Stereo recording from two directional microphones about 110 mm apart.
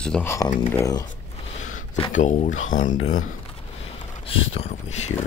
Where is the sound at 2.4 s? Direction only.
90° left.